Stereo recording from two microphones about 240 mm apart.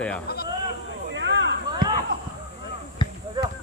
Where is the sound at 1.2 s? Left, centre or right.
Right.